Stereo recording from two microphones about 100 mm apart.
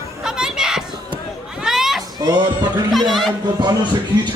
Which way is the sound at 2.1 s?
45° right (ahead or behind).